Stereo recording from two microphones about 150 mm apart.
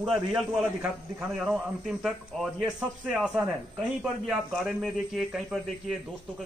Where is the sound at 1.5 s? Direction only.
Centre (ahead or behind).